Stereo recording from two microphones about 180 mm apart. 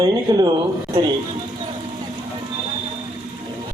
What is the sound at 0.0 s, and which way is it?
Speech, 20° right (ahead or behind).